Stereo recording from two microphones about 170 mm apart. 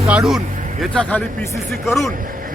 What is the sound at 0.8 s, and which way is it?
Speech, 5° left (ahead or behind).